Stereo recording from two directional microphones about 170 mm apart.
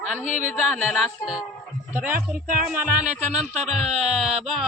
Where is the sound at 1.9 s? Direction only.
10° right (ahead or behind).